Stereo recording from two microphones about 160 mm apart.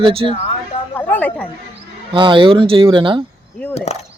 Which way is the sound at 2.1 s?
30° right (ahead or behind).